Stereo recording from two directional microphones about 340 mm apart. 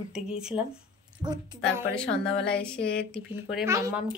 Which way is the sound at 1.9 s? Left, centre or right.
Centre.